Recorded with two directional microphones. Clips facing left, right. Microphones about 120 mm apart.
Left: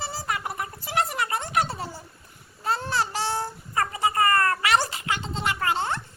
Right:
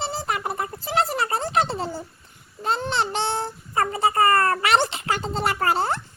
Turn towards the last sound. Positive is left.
turn(degrees=-35)  # may be behind; listen again after turning